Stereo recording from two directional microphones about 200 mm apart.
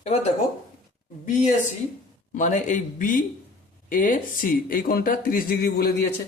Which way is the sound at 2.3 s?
40° left (ahead or behind).